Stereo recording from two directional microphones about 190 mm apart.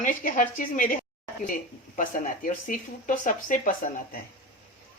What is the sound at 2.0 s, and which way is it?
A woman's voice, 45° left (ahead or behind).